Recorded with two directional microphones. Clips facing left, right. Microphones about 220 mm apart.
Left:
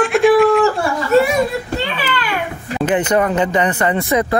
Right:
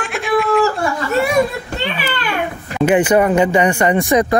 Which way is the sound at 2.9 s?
10° right (ahead or behind).